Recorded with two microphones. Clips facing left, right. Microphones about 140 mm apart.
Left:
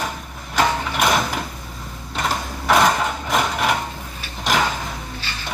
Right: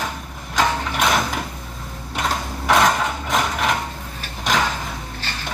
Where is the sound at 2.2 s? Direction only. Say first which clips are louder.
Even; centre (ahead or behind).